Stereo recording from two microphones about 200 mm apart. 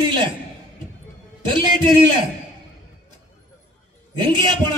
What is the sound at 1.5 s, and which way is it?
Speech, 25° right (ahead or behind).